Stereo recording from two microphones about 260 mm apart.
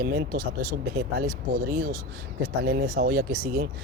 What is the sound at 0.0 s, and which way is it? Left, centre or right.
Speech, right.